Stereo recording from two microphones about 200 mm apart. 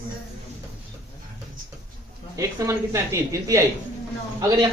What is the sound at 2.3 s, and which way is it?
A man's voice, 15° right (ahead or behind).